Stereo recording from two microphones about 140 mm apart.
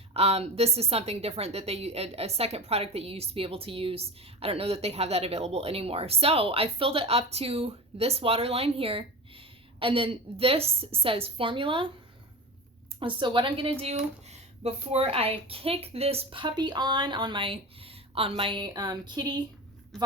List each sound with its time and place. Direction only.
0.1 s a woman's voice: 45° right (ahead or behind)
13.0 s speech: 35° right (ahead or behind)